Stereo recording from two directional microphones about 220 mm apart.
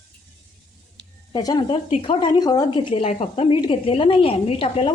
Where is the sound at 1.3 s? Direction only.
20° left (ahead or behind).